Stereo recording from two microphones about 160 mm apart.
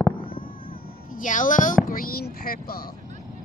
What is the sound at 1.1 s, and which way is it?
Speech, 55° left (ahead or behind).